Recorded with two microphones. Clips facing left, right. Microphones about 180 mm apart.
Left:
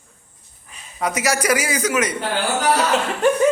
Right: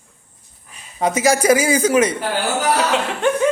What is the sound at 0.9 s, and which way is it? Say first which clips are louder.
A man's voice: right 5 dB; 25° right (ahead or behind).